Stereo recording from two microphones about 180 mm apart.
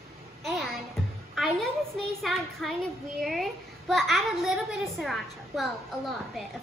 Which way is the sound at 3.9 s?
Centre (ahead or behind).